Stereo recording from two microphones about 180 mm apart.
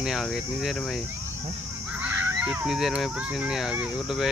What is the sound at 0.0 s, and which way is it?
Speech, centre (ahead or behind).